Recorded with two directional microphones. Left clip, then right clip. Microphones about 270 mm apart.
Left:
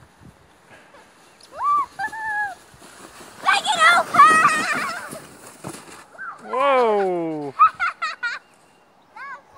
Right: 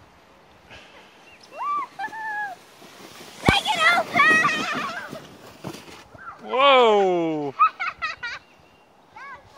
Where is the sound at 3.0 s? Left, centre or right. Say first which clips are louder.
Even; centre.